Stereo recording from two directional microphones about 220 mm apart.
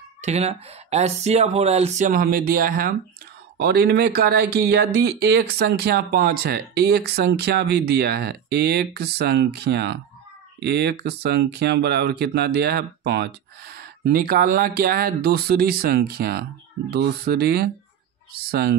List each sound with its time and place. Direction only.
0.2 s speech: 30° right (ahead or behind); by 18.8 s 45° right (ahead or behind)